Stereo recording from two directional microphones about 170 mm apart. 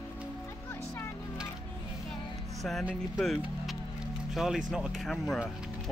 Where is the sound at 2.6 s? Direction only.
Centre (ahead or behind).